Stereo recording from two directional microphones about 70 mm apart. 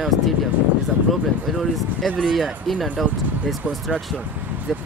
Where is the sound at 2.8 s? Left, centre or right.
Centre.